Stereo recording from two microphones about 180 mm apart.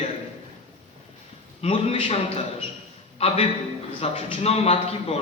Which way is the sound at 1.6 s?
30° left (ahead or behind).